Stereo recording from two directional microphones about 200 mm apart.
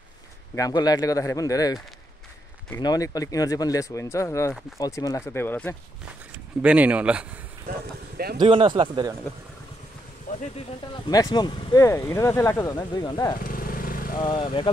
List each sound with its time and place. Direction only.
0.6 s speech: 20° left (ahead or behind)
2.8 s speech: 20° left (ahead or behind)
6.6 s speech: 5° right (ahead or behind)
8.4 s speech: 25° right (ahead or behind)
10.3 s a sound: 45° left (ahead or behind)
11.1 s speech: 20° left (ahead or behind)
13.4 s vehicle: 45° left (ahead or behind)
14.2 s speech: 20° left (ahead or behind)